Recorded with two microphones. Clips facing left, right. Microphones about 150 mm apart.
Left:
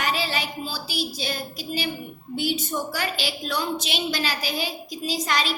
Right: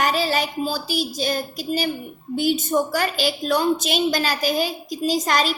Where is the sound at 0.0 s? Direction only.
45° right (ahead or behind).